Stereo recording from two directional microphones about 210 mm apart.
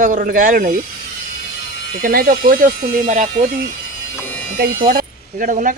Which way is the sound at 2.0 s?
45° right (ahead or behind).